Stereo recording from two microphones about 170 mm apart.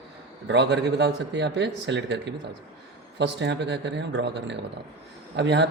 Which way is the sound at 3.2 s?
90° right.